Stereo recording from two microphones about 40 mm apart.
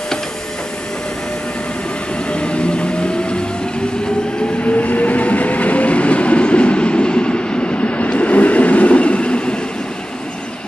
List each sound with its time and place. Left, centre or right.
2.3 s train: left
4.6 s train: left